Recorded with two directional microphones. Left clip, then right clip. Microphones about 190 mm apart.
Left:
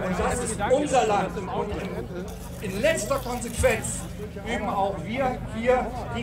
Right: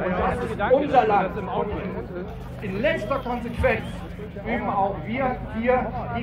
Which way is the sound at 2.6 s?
90° left.